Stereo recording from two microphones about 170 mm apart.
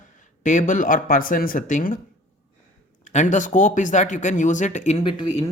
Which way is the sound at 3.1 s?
45° left (ahead or behind).